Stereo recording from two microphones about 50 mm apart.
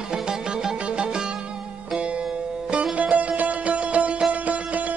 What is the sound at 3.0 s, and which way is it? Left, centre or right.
Music, right.